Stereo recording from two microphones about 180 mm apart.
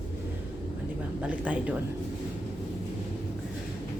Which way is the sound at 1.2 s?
5° right (ahead or behind).